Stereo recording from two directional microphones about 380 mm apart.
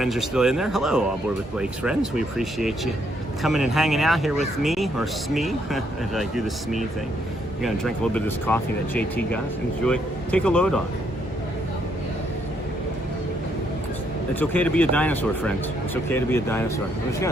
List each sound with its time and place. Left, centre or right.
0.0 s speech: centre
14.3 s speech: centre